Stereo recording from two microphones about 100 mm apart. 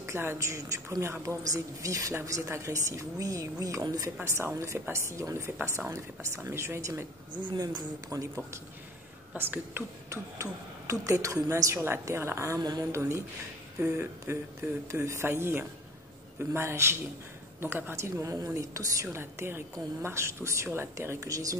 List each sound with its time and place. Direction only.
0.0 s a woman's voice: 25° right (ahead or behind)
4.2 s a woman's voice: 30° right (ahead or behind)
7.4 s a woman's voice: 45° right (ahead or behind)
9.3 s a woman's voice: 20° right (ahead or behind)
10.0 s a woman's voice: 30° right (ahead or behind)
13.7 s a woman's voice: 25° right (ahead or behind)